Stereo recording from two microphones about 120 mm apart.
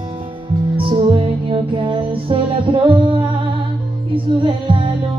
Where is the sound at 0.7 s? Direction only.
50° right (ahead or behind).